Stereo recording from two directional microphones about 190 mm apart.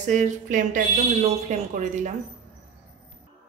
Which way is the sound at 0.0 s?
40° right (ahead or behind).